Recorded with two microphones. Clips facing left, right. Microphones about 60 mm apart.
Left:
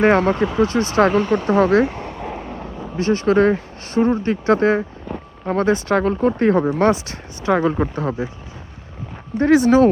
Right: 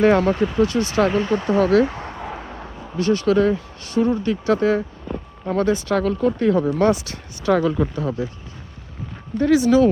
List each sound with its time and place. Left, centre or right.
0.0 s speech: left
3.0 s speech: left
9.4 s speech: left